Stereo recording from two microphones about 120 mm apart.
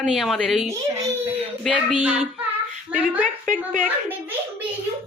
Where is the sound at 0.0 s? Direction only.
Centre (ahead or behind).